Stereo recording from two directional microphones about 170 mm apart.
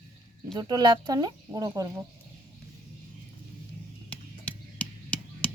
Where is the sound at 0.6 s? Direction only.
25° right (ahead or behind).